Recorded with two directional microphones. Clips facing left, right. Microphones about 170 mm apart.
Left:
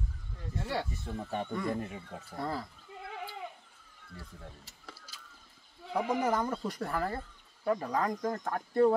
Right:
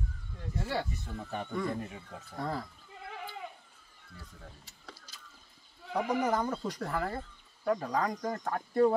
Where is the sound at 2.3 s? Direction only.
5° left (ahead or behind).